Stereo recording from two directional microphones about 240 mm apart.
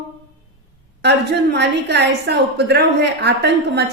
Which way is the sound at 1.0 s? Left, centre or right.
Right.